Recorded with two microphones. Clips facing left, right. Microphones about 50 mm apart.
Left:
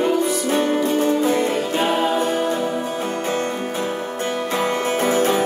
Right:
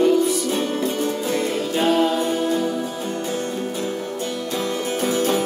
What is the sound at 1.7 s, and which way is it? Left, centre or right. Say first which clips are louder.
Music: right 3 dB; centre.